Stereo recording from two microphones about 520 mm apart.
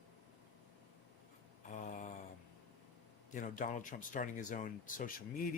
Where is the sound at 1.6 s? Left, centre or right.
Centre.